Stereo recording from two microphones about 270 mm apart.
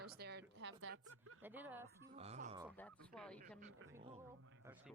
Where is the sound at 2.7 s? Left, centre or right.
Centre.